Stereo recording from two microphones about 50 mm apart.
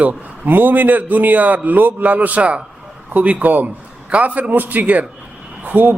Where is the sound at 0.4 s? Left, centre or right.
Right.